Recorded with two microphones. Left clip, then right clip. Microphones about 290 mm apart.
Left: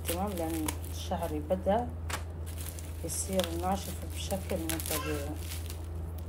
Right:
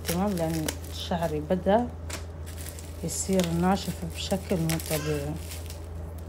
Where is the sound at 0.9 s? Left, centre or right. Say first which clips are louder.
Right 8 dB; right.